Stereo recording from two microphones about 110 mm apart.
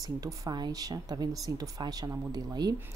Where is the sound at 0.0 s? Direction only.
35° right (ahead or behind).